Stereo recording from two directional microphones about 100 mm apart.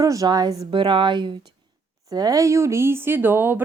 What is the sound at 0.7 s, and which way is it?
Speech, 55° right (ahead or behind).